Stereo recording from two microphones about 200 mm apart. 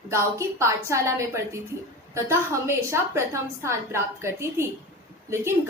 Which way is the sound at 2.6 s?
15° right (ahead or behind).